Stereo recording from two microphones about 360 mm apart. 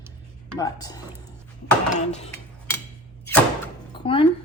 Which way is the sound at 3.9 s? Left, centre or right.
Centre.